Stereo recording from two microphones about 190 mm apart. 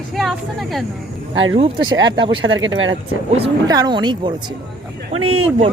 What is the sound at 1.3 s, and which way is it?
Speech, 90° right.